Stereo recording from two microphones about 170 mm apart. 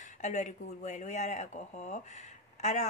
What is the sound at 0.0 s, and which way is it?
Speech, 45° left (ahead or behind).